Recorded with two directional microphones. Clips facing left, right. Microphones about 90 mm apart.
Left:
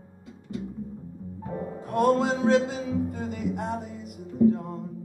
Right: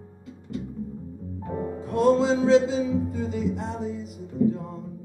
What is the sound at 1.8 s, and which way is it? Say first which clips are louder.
Music: right 2 dB; 55° left (ahead or behind).